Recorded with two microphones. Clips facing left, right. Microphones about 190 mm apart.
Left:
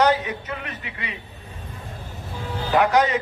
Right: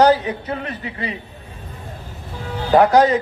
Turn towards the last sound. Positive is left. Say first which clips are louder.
# right 6 dB
turn(degrees=-35)  # may be behind; listen again after turning